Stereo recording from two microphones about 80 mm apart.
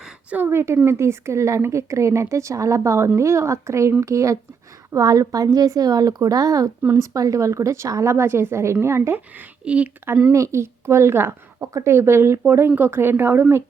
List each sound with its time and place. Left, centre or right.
0.3 s a woman's voice: right
9.6 s speech: centre
10.3 s speech: right